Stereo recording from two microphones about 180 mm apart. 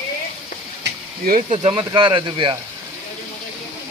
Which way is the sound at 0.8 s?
55° right (ahead or behind).